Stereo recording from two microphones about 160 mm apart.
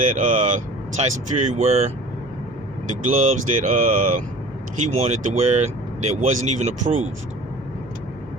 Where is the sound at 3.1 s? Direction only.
50° right (ahead or behind).